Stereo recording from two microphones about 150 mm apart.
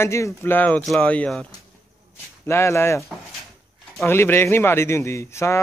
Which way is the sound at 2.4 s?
20° left (ahead or behind).